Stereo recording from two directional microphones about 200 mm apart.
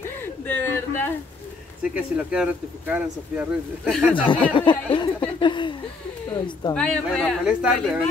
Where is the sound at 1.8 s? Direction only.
5° right (ahead or behind).